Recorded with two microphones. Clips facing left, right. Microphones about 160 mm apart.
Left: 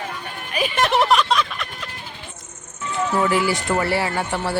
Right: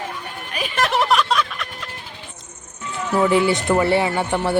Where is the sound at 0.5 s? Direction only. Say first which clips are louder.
Left 2 dB; centre (ahead or behind).